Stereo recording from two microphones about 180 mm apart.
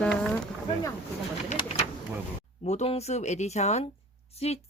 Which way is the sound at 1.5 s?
35° left (ahead or behind).